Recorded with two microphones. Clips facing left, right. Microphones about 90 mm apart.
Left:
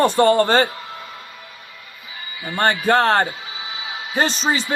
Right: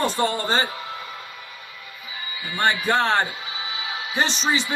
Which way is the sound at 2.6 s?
45° left (ahead or behind).